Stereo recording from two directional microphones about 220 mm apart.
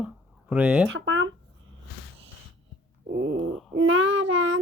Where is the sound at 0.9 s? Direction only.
60° right (ahead or behind).